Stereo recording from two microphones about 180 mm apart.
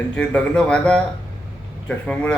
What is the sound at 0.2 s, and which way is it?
Speech, 5° left (ahead or behind).